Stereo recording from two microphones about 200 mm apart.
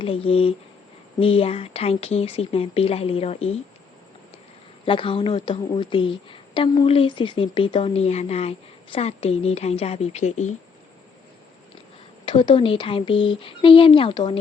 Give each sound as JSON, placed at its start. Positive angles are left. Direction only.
{"t": 0.0, "sound": "a woman's voice", "side_deg": 25}
{"t": 4.9, "sound": "a woman's voice", "side_deg": 25}
{"t": 12.2, "sound": "a woman's voice", "side_deg": 25}